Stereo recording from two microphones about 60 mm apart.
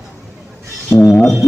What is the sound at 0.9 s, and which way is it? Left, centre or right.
Speech, centre.